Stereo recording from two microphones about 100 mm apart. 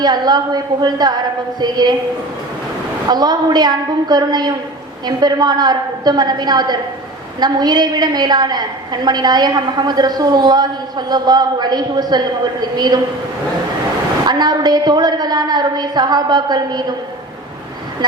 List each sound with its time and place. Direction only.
0.0 s a woman's voice: 45° right (ahead or behind)
3.1 s a woman's voice: 45° right (ahead or behind)
14.3 s a woman's voice: 45° right (ahead or behind)